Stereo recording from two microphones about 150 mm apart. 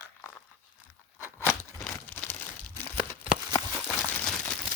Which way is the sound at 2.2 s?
10° left (ahead or behind).